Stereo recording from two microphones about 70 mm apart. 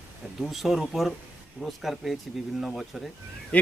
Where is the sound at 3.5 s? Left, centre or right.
Centre.